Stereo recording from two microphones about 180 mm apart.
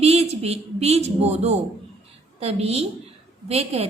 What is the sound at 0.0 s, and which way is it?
A woman's voice, 35° right (ahead or behind).